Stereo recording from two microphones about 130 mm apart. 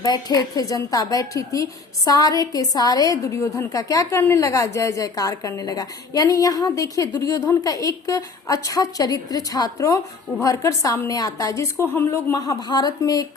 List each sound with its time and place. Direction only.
0.0 s a woman's voice: 30° left (ahead or behind)